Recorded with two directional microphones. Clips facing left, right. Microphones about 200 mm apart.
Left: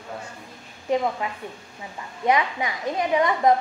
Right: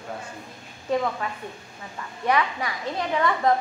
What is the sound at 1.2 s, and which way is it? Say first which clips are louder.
A woman's voice: left 1 dB; 15° left (ahead or behind).